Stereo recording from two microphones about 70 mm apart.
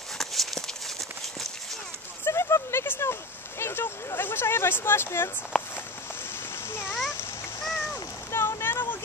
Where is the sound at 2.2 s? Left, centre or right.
Left.